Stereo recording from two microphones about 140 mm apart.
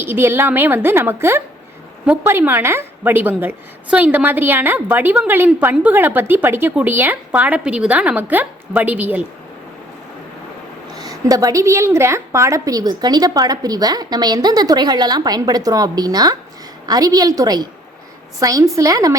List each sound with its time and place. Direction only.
0.0 s a woman's voice: 15° right (ahead or behind)
10.9 s a woman's voice: 25° right (ahead or behind)